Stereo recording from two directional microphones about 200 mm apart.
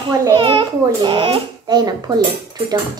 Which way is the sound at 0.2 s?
25° right (ahead or behind).